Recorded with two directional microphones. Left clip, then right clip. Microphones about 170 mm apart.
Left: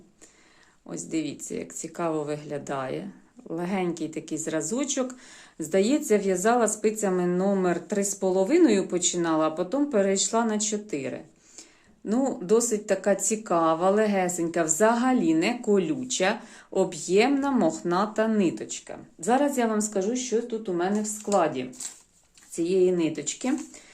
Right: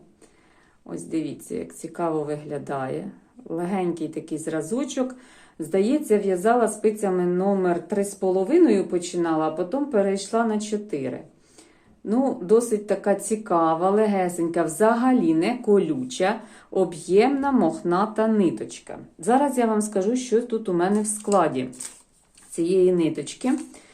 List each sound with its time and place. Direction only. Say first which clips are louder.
0.9 s a woman's voice: right 2 dB; 15° left (ahead or behind)